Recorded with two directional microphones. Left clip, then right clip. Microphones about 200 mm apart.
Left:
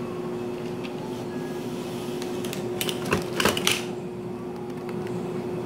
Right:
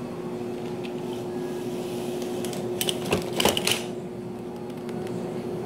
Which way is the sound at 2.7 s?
5° right (ahead or behind).